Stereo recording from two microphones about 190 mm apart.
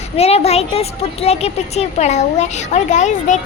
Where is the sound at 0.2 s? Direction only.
35° left (ahead or behind).